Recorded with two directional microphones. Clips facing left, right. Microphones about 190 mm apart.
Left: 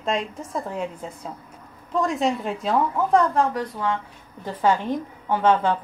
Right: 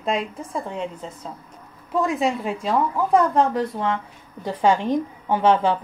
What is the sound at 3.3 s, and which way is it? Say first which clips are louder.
A woman's voice: right 3 dB; 25° right (ahead or behind).